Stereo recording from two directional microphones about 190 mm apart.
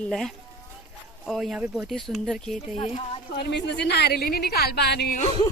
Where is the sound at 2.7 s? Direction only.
30° left (ahead or behind).